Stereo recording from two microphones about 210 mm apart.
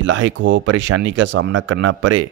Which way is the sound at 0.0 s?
60° right (ahead or behind).